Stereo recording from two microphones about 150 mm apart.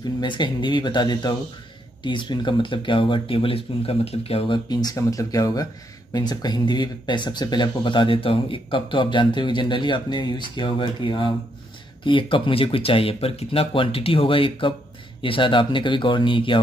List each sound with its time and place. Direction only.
0.2 s speech: 30° left (ahead or behind)